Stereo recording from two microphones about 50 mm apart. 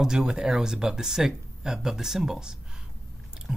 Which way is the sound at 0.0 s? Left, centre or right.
Centre.